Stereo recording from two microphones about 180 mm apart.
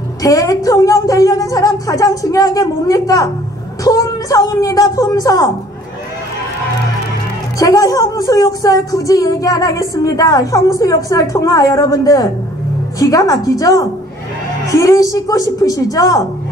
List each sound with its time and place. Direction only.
0.2 s speech: 20° left (ahead or behind)
7.5 s speech: 20° left (ahead or behind)